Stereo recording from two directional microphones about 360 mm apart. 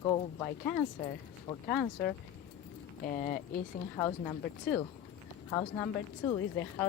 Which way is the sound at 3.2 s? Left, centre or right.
Left.